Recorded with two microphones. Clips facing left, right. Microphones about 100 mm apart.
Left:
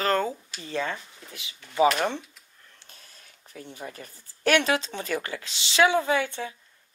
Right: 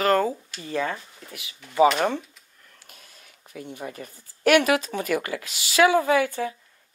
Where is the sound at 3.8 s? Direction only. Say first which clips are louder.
Right 3 dB; 30° right (ahead or behind).